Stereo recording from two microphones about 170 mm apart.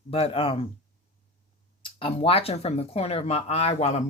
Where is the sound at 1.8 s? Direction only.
35° left (ahead or behind).